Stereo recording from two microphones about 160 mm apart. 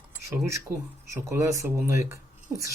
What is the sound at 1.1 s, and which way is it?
Speech, 20° right (ahead or behind).